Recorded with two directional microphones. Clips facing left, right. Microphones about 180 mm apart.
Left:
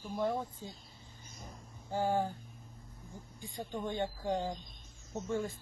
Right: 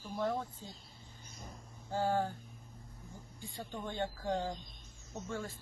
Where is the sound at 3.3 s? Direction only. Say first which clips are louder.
Left 4 dB; 15° left (ahead or behind).